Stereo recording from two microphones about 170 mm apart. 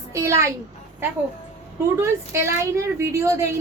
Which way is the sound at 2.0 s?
15° right (ahead or behind).